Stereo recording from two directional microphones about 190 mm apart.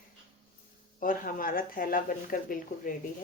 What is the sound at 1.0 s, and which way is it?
Speech, 45° left (ahead or behind).